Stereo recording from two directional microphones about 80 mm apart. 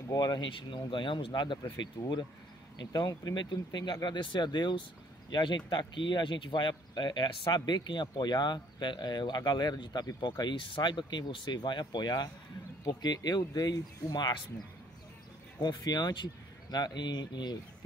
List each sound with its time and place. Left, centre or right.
0.2 s speech: left
1.6 s speech: left
2.8 s speech: left
10.4 s speech: left
15.6 s speech: left